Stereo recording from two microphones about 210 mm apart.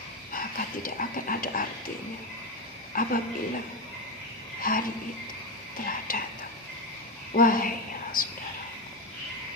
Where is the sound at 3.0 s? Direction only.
40° left (ahead or behind).